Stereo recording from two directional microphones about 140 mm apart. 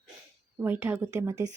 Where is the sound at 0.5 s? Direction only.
15° right (ahead or behind).